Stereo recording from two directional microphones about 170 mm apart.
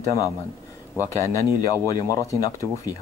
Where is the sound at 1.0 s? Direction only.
20° left (ahead or behind).